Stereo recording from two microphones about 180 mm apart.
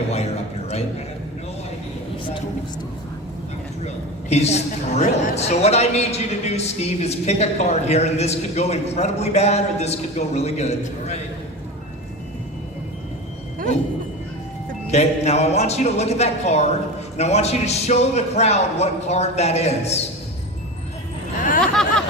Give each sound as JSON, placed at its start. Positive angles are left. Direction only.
{"t": 3.8, "sound": "a woman's voice", "side_deg": 35}
{"t": 14.8, "sound": "a woman's voice", "side_deg": 35}
{"t": 21.6, "sound": "a sound", "side_deg": 5}